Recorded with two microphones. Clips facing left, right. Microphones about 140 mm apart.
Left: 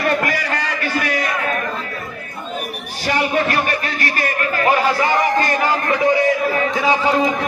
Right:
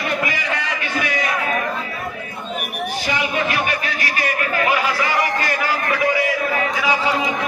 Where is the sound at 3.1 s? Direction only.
40° left (ahead or behind).